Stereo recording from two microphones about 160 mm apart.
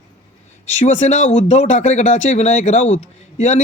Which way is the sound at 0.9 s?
50° left (ahead or behind).